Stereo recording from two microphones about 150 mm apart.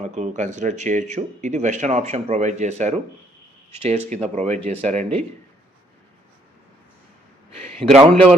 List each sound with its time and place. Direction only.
0.0 s speech: 50° right (ahead or behind)
4.1 s speech: 50° right (ahead or behind)
7.8 s speech: 45° right (ahead or behind)
8.1 s a man's voice: 5° left (ahead or behind)